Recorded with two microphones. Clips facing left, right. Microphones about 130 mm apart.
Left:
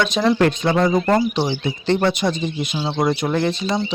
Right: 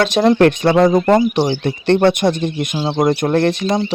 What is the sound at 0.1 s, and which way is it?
Speech, 55° right (ahead or behind).